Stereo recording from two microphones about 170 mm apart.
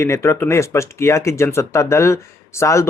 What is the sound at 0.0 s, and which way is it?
Speech, 15° left (ahead or behind).